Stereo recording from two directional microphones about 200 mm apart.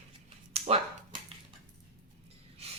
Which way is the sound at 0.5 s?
30° right (ahead or behind).